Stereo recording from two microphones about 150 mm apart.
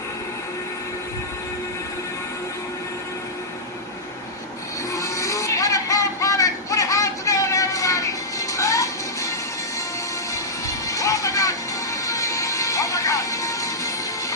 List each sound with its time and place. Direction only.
4.9 s music: 20° left (ahead or behind)
10.3 s music: 20° left (ahead or behind)